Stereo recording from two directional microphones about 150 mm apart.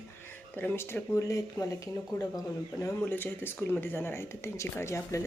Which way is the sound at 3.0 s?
15° left (ahead or behind).